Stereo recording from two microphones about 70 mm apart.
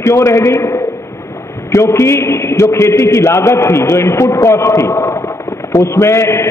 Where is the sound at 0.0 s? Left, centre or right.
Left.